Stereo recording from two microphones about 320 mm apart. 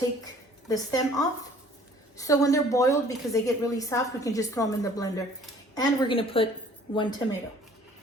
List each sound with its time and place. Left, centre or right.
0.7 s a woman's voice: centre